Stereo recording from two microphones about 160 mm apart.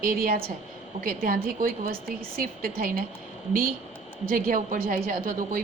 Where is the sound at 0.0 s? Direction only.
65° right (ahead or behind).